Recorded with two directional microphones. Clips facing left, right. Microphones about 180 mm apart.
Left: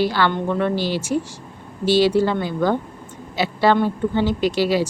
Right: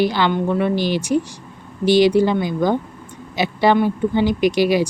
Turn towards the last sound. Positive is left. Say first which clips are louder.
# right 3 dB
turn(degrees=-15)  # may be behind; listen again after turning